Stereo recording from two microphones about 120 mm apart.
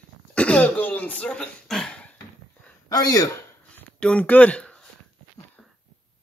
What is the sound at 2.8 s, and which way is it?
Speech, 30° left (ahead or behind).